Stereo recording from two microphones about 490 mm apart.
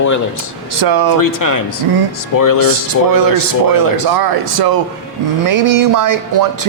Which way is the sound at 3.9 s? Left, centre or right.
Right.